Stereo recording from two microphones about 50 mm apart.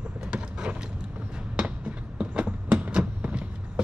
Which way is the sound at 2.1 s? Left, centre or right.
Right.